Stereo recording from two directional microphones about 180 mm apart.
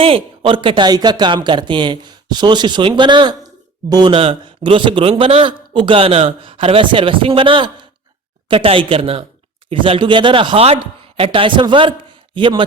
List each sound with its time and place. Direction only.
0.0 s a man's voice: 30° right (ahead or behind)